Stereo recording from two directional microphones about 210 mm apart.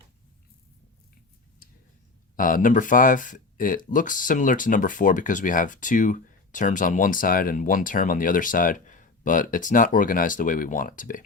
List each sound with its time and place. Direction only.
2.3 s speech: 40° left (ahead or behind)